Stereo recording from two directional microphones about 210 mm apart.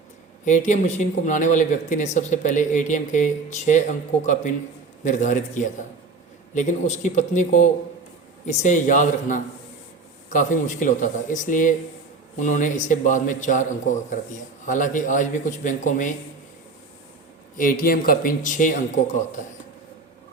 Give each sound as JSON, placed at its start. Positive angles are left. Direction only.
{"t": 0.4, "sound": "speech", "side_deg": 35}
{"t": 5.0, "sound": "speech", "side_deg": 35}
{"t": 17.6, "sound": "speech", "side_deg": 40}